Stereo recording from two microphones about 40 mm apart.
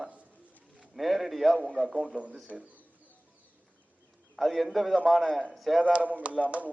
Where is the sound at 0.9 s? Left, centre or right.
Centre.